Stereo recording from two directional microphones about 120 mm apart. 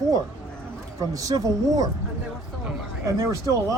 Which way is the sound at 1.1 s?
30° right (ahead or behind).